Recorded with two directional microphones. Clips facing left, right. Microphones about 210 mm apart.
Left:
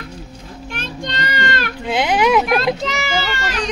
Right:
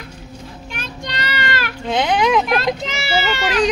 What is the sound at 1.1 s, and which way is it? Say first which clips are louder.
Child singing: left 1 dB; 50° left (ahead or behind).